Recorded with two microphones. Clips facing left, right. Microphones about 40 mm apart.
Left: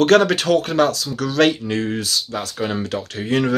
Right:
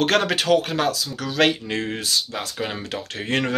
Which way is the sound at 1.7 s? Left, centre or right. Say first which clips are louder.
Left 4 dB; right.